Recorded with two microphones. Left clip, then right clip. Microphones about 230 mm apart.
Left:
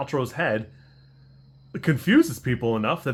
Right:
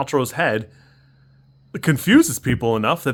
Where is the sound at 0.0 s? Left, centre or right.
Right.